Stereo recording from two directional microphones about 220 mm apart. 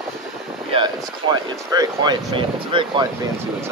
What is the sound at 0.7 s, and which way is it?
Speech, 20° right (ahead or behind).